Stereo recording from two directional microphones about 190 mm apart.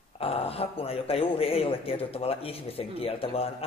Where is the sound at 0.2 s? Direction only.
30° left (ahead or behind).